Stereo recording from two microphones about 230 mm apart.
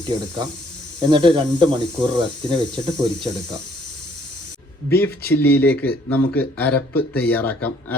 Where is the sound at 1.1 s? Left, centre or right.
Right.